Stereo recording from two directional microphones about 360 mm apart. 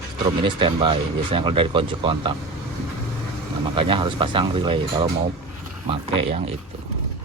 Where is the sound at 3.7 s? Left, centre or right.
Centre.